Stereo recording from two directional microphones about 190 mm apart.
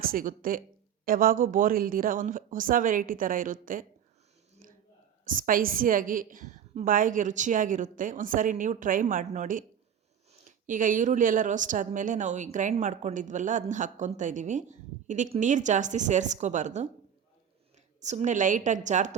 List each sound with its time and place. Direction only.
0.0 s a woman's voice: 50° right (ahead or behind)
4.6 s a sound: 45° right (ahead or behind)
5.2 s a woman's voice: 45° right (ahead or behind)
18.0 s speech: 35° right (ahead or behind)